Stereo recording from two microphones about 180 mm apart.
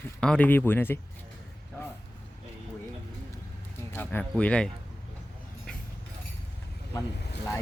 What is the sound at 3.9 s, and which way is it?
Speech, 10° left (ahead or behind).